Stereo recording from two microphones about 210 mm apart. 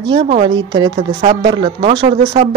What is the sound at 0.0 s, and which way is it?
Speech, 25° right (ahead or behind).